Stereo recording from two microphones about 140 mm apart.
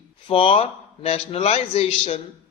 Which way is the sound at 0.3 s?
45° left (ahead or behind).